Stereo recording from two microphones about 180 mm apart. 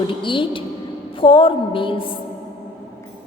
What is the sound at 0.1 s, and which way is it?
A woman's voice, 30° left (ahead or behind).